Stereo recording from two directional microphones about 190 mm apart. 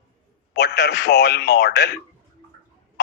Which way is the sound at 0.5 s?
60° left (ahead or behind).